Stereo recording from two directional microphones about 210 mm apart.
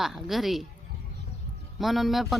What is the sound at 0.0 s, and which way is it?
Speech, centre (ahead or behind).